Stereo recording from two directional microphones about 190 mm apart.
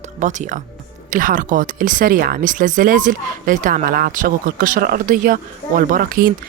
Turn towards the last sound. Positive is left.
turn(degrees=-50)  # may be behind; listen again after turning